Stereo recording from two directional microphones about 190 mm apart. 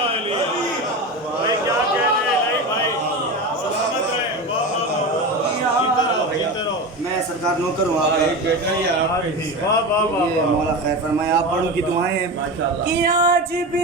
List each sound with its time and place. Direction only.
12.9 s speech: 60° right (ahead or behind)